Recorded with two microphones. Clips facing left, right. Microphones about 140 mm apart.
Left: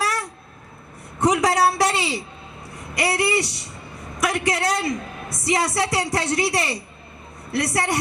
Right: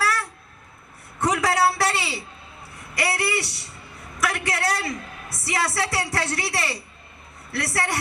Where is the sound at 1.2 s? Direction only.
20° left (ahead or behind).